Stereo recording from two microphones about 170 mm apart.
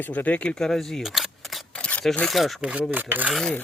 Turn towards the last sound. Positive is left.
turn(degrees=5)  # may be behind; listen again after turning